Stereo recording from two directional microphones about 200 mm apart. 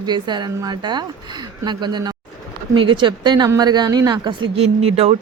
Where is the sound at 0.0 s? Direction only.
20° right (ahead or behind).